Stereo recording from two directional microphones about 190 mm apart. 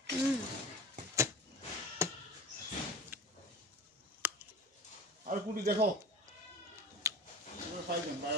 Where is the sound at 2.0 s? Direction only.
15° right (ahead or behind).